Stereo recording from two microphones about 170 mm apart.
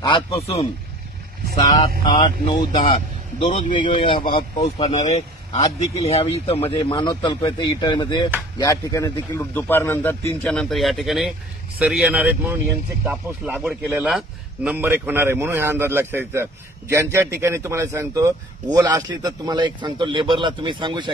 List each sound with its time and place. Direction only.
0.0 s speech: 25° left (ahead or behind)
1.7 s a man's voice: 25° left (ahead or behind)
3.4 s a man's voice: 45° left (ahead or behind)
3.7 s a man's voice: 30° left (ahead or behind)
4.6 s a man's voice: 40° left (ahead or behind); by 21.1 s 30° right (ahead or behind)